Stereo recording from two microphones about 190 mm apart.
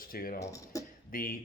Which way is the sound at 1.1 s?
50° left (ahead or behind).